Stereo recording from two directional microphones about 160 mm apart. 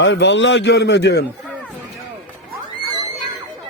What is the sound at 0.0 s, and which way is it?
A man's voice, 90° left.